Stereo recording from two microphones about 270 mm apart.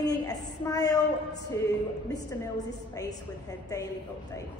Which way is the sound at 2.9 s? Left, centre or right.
Centre.